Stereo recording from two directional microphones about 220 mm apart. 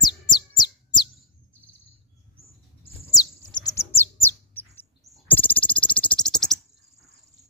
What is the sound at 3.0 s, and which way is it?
Bird, 15° left (ahead or behind).